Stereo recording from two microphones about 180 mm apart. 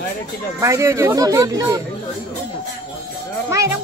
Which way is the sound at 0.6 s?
15° right (ahead or behind).